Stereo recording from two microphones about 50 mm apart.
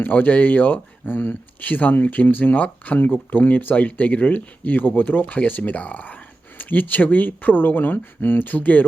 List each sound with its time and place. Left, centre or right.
0.0 s speech: left
1.6 s speech: left